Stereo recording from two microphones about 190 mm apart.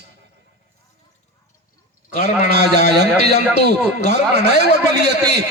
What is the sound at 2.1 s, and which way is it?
Speech, 45° left (ahead or behind).